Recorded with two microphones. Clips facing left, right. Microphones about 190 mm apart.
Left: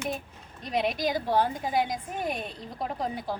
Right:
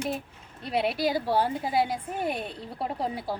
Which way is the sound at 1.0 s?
5° right (ahead or behind).